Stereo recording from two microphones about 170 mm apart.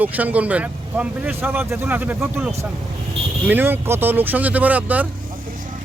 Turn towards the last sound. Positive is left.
turn(degrees=-10)  # may be behind; listen again after turning